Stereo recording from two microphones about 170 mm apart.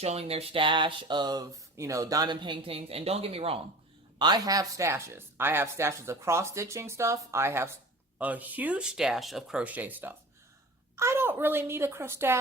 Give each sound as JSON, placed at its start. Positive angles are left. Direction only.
{"t": 0.0, "sound": "speech", "side_deg": -35}
{"t": 4.2, "sound": "speech", "side_deg": -25}